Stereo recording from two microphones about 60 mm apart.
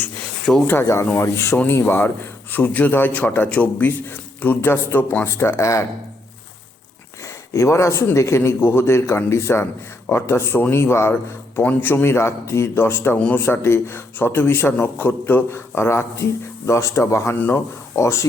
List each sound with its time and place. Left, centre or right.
0.5 s speech: centre
1.2 s speech: left
1.9 s a man's voice: left
5.3 s speech: left
7.5 s speech: left
8.4 s a man's voice: left
11.6 s a man's voice: left
15.7 s speech: left